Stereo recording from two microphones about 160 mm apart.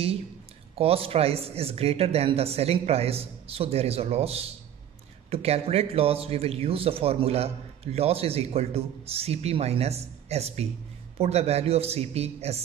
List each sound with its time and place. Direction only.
0.7 s speech: 35° right (ahead or behind)